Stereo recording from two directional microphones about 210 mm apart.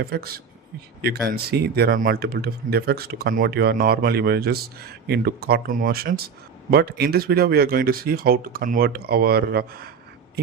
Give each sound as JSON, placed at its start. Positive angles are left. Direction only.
{"t": 0.0, "sound": "speech", "side_deg": -45}